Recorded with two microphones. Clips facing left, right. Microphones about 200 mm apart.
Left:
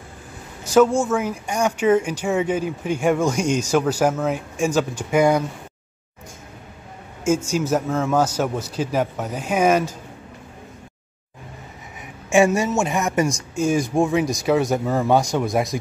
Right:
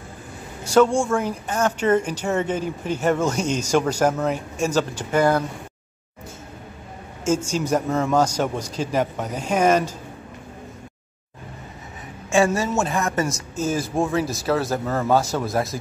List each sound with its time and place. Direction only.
0.7 s speech: 5° left (ahead or behind)
7.5 s speech: 5° left (ahead or behind)
12.3 s speech: 15° left (ahead or behind)
13.7 s speech: 5° right (ahead or behind)
13.9 s speech: 15° left (ahead or behind)